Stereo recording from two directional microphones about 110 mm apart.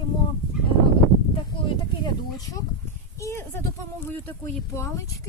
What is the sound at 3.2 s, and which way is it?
Speech, 25° left (ahead or behind).